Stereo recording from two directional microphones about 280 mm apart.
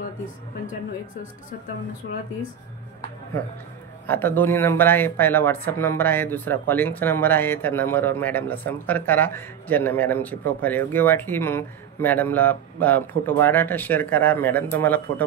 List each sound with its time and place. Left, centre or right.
2.0 s speech: left
4.1 s speech: centre